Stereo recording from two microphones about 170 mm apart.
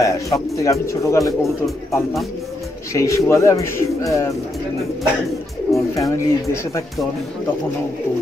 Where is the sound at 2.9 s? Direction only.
20° left (ahead or behind).